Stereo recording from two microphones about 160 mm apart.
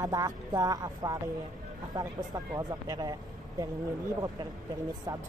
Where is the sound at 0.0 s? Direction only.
20° right (ahead or behind).